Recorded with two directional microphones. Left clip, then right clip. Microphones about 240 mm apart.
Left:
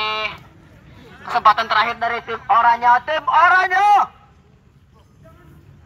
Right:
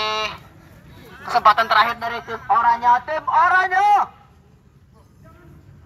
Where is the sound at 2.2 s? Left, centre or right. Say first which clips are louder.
Left 2 dB; left.